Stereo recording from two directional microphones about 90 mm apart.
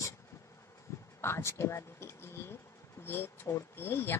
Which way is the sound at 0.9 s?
30° left (ahead or behind).